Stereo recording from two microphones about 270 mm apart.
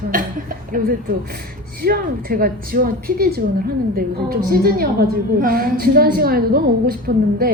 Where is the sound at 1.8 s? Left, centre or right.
Right.